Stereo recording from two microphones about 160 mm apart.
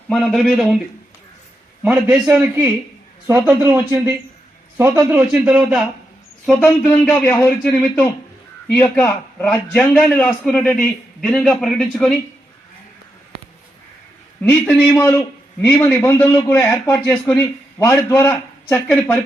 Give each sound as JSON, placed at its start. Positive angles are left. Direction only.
{"t": 0.1, "sound": "a man's voice", "side_deg": 0}
{"t": 1.8, "sound": "a man's voice", "side_deg": -5}
{"t": 14.4, "sound": "a man's voice", "side_deg": 10}